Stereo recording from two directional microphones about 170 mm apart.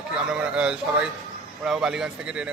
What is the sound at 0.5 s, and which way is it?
A man's voice, 5° right (ahead or behind).